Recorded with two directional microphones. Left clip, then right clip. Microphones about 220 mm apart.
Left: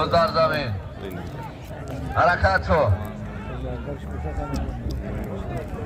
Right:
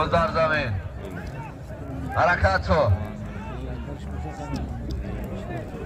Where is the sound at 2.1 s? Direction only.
10° left (ahead or behind).